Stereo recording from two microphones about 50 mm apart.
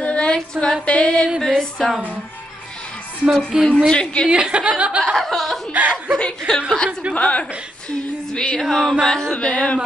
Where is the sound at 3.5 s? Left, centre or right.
Centre.